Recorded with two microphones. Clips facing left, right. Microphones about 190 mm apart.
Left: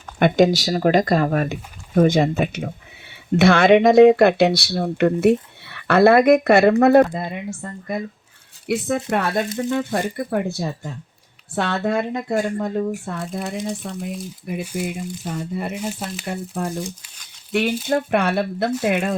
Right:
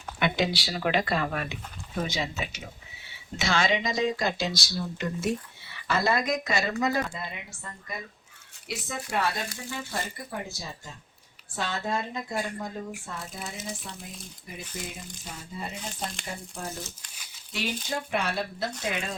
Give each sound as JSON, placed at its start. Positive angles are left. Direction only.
{"t": 0.2, "sound": "speech", "side_deg": 45}
{"t": 7.2, "sound": "speech", "side_deg": 50}
{"t": 14.6, "sound": "speech", "side_deg": 10}
{"t": 15.2, "sound": "speech", "side_deg": 65}
{"t": 15.9, "sound": "speech", "side_deg": 5}
{"t": 16.2, "sound": "speech", "side_deg": 65}